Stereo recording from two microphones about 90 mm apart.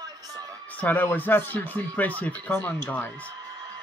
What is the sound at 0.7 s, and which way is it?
Speech, 20° left (ahead or behind).